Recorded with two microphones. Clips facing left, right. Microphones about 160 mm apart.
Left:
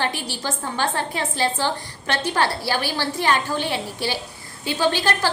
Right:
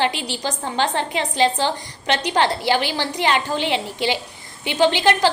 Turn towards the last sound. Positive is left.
turn(degrees=-20)  # may be behind; listen again after turning